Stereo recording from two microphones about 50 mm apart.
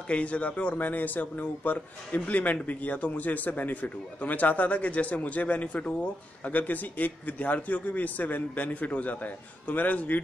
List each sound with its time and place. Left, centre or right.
0.1 s speech: left